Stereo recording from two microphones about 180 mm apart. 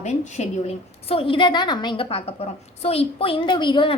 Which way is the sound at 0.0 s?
35° left (ahead or behind).